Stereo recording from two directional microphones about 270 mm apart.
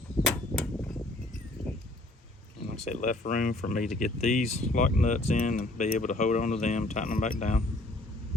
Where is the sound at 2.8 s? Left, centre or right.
Left.